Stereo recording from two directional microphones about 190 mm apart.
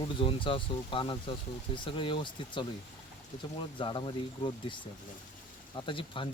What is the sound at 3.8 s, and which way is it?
Speech, 25° left (ahead or behind).